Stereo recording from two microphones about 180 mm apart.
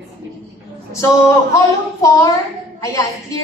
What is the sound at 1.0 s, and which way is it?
A woman's voice, 20° left (ahead or behind).